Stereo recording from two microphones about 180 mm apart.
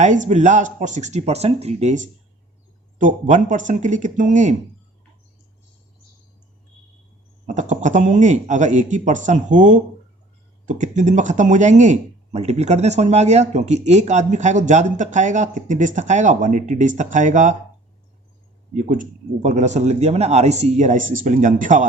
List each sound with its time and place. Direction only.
0.0 s speech: 40° right (ahead or behind)
7.4 s speech: 45° right (ahead or behind)
18.7 s speech: 45° right (ahead or behind)